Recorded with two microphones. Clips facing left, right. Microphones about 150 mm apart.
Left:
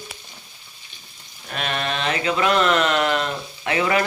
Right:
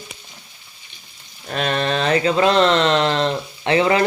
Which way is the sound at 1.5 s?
35° right (ahead or behind).